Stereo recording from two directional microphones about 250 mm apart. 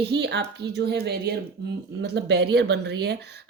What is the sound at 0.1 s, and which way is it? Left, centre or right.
A woman's voice, right.